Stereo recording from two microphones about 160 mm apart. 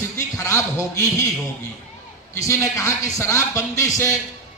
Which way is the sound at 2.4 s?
20° left (ahead or behind).